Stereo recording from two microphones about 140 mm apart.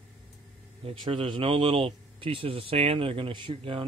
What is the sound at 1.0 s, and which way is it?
Speech, 35° right (ahead or behind).